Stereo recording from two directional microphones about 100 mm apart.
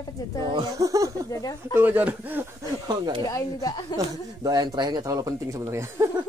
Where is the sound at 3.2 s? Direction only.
40° left (ahead or behind).